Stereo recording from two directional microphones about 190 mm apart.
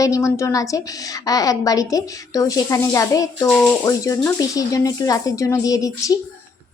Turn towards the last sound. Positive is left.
turn(degrees=20)  # may be behind; listen again after turning